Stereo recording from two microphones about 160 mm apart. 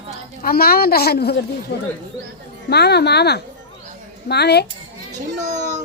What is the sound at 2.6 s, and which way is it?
Speech, 90° left.